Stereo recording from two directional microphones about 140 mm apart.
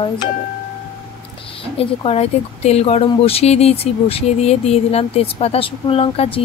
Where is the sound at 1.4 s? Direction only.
40° left (ahead or behind).